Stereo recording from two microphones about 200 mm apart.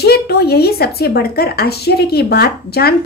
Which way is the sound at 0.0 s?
55° left (ahead or behind).